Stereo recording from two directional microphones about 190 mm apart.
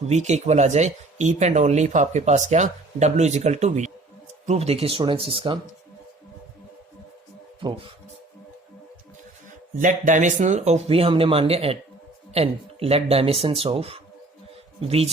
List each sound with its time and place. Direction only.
0.1 s speech: 35° right (ahead or behind)
9.7 s speech: 45° right (ahead or behind)